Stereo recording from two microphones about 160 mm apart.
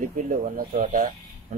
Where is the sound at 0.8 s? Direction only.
55° right (ahead or behind).